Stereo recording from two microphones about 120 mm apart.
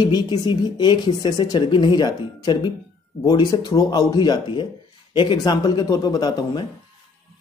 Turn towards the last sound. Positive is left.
turn(degrees=35)  # may be behind; listen again after turning